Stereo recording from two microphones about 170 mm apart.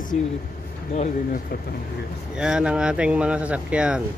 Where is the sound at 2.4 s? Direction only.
5° right (ahead or behind).